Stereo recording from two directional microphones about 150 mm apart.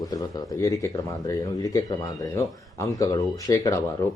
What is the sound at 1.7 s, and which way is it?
Speech, 25° left (ahead or behind).